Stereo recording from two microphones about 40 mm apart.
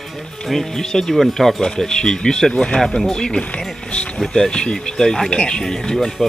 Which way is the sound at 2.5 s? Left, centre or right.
Left.